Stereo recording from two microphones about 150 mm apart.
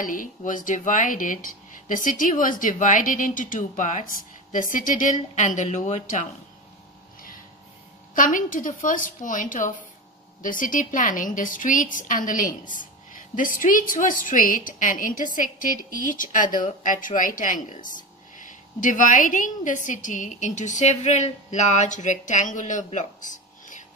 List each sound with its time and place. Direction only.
0.0 s a woman's voice: 65° left (ahead or behind)
8.1 s a woman's voice: 60° left (ahead or behind)